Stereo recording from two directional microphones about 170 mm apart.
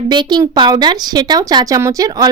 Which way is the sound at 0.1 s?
25° right (ahead or behind).